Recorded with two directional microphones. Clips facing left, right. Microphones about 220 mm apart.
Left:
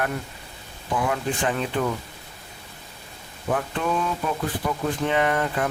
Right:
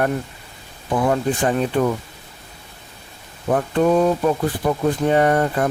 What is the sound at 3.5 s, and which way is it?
Speech, 40° right (ahead or behind).